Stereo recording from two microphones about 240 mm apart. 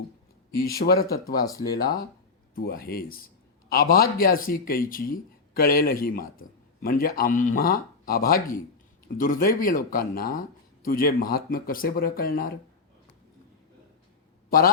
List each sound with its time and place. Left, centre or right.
0.5 s speech: left
1.5 s speech: centre
2.6 s speech: left